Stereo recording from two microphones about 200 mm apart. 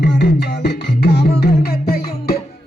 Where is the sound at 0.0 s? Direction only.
55° left (ahead or behind).